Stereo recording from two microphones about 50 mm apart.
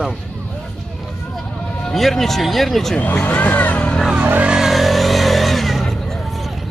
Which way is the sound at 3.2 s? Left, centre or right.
Left.